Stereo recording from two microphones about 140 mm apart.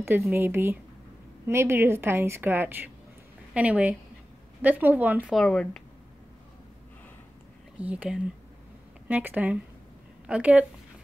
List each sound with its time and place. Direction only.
0.0 s a woman's voice: 15° right (ahead or behind)
5.3 s speech: 5° left (ahead or behind)
7.8 s a woman's voice: 10° right (ahead or behind)